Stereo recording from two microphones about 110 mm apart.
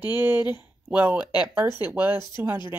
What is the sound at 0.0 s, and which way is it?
Speech, 20° right (ahead or behind).